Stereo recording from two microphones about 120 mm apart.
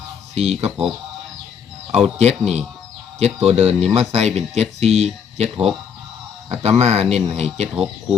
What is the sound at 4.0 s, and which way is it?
Speech, 60° right (ahead or behind).